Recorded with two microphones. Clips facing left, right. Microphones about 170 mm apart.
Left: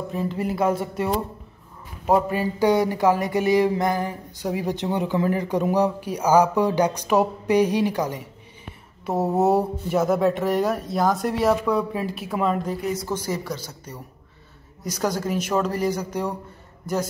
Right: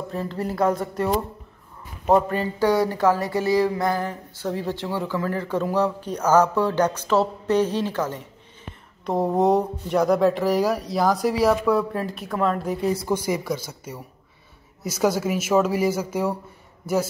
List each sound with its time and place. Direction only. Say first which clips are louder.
0.1 s a sound: left 2 dB; 10° left (ahead or behind)
0.7 s speech: even; 5° left (ahead or behind)
2.0 s a sound: right 1 dB; 10° left (ahead or behind)
9.0 s speech: even; 5° left (ahead or behind)
12.8 s a woman's voice: right 3 dB; 30° right (ahead or behind)
13.1 s a man's voice: right 3 dB; 10° right (ahead or behind)